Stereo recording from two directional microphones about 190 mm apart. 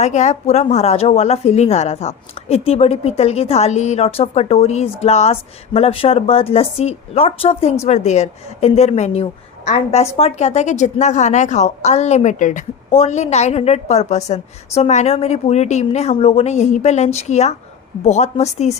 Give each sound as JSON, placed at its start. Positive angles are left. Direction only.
{"t": 0.0, "sound": "a woman's voice", "side_deg": 35}